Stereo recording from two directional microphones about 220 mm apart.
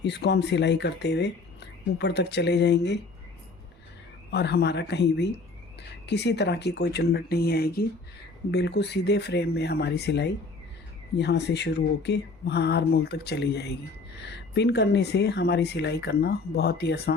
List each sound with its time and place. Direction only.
0.0 s speech: 50° left (ahead or behind)
4.3 s speech: 50° left (ahead or behind)